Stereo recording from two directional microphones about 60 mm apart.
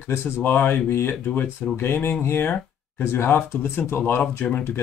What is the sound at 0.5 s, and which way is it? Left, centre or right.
Speech, left.